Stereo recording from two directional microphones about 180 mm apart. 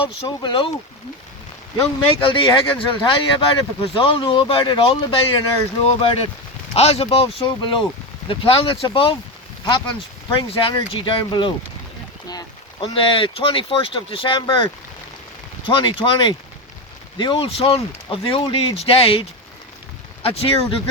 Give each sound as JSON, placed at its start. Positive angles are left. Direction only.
{"t": 0.0, "sound": "speech", "side_deg": 25}
{"t": 1.8, "sound": "speech", "side_deg": 30}
{"t": 6.7, "sound": "speech", "side_deg": 35}
{"t": 20.2, "sound": "speech", "side_deg": 30}